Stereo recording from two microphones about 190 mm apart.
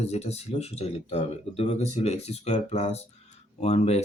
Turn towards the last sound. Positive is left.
turn(degrees=35)  # may be behind; listen again after turning